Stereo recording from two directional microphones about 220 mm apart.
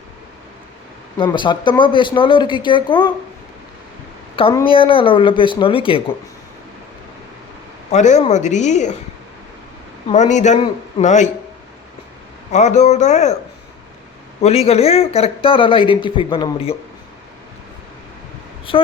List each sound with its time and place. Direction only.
1.2 s speech: 20° left (ahead or behind)
4.5 s speech: 25° left (ahead or behind)
7.9 s speech: 30° left (ahead or behind)
10.1 s speech: 30° left (ahead or behind)
12.5 s speech: 30° left (ahead or behind)
14.4 s speech: 30° left (ahead or behind)